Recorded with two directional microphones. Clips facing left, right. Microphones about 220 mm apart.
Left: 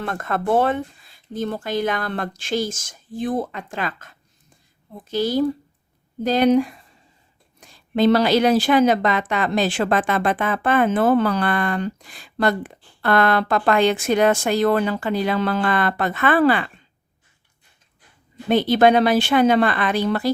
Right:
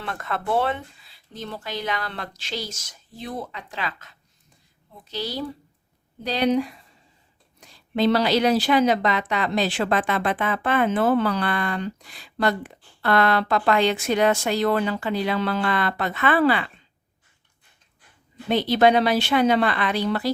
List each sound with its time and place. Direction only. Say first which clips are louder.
0.0 s a woman's voice: left 5 dB; 45° left (ahead or behind)
18.4 s a woman's voice: left 3 dB; 50° left (ahead or behind)